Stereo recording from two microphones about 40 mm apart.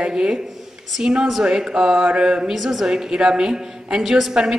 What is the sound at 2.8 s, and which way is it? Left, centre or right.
A woman's voice, centre.